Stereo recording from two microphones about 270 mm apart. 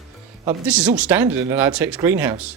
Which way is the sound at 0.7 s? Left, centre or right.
Centre.